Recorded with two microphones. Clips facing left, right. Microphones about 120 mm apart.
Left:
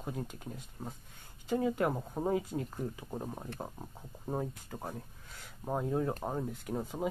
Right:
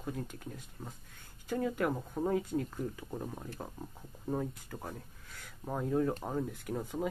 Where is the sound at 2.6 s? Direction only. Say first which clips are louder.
Even; 20° left (ahead or behind).